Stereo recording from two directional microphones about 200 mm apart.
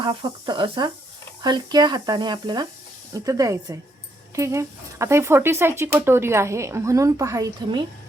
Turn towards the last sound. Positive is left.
turn(degrees=-15)  # may be behind; listen again after turning